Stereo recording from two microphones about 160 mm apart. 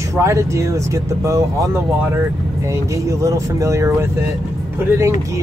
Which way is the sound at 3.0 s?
20° right (ahead or behind).